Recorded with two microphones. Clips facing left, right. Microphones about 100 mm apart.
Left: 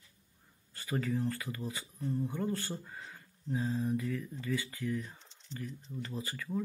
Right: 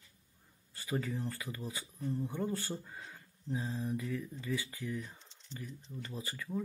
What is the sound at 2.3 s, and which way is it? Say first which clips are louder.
Speech: left 1 dB; 20° right (ahead or behind).